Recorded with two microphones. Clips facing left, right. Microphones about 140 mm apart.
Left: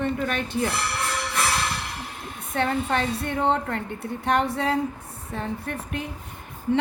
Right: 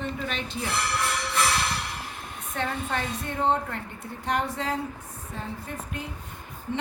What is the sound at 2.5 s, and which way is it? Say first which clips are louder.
A woman's voice: left 6 dB; 70° left (ahead or behind).